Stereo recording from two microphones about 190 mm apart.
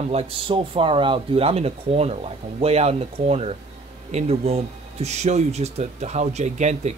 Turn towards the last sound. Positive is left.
turn(degrees=-35)  # may be behind; listen again after turning